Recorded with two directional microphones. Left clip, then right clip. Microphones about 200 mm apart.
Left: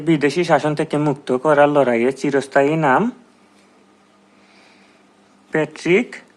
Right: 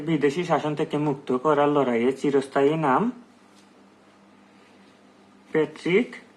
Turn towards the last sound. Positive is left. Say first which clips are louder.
# left 6 dB
turn(degrees=40)  # may be behind; listen again after turning